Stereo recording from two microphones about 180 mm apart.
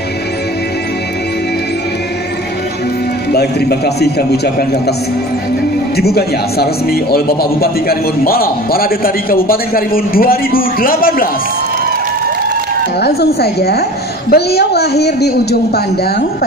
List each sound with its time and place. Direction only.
3.3 s a man's voice: 60° left (ahead or behind)
5.9 s a man's voice: 60° left (ahead or behind)
13.0 s a man's voice: 65° left (ahead or behind)